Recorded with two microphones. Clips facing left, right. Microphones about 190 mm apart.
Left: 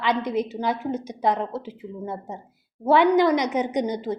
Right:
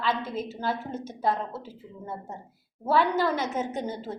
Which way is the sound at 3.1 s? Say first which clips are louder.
Left 7 dB; 15° left (ahead or behind).